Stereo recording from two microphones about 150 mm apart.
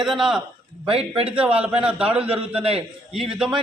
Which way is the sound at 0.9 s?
40° right (ahead or behind).